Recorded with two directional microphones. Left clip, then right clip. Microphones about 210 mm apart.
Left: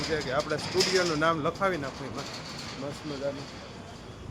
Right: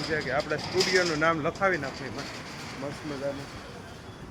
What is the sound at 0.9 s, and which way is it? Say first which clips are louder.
Speech: right 3 dB; 10° left (ahead or behind).